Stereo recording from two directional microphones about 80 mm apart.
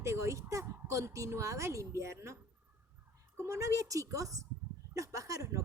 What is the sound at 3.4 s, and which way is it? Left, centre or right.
A woman's voice, right.